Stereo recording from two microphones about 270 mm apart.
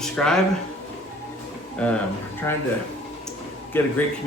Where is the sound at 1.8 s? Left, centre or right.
Centre.